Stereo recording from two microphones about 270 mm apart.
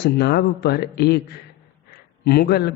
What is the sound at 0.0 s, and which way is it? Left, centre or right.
A man's voice, left.